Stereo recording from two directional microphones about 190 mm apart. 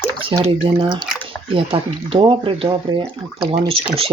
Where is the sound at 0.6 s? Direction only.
25° right (ahead or behind).